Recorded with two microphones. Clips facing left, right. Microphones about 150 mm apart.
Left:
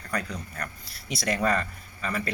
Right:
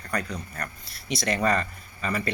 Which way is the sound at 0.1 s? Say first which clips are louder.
Right 1 dB; 5° left (ahead or behind).